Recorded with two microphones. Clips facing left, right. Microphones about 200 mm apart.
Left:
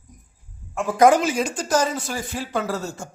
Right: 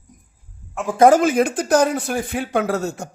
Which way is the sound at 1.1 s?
55° right (ahead or behind).